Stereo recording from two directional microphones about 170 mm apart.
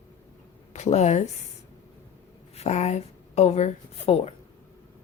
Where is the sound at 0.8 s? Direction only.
40° left (ahead or behind).